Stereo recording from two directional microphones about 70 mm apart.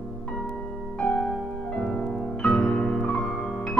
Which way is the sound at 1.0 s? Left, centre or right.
Centre.